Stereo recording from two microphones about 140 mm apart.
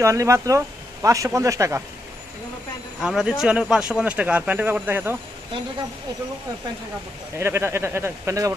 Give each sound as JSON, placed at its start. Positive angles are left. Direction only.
{"t": 0.0, "sound": "speech", "side_deg": -20}
{"t": 3.0, "sound": "speech", "side_deg": -5}
{"t": 7.3, "sound": "speech", "side_deg": -20}